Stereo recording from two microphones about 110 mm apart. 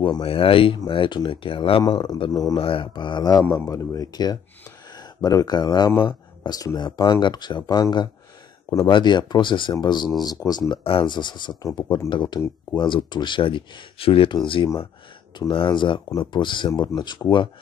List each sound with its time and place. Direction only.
0.0 s speech: 55° left (ahead or behind)
1.8 s speech: 40° left (ahead or behind)
10.7 s speech: 55° left (ahead or behind)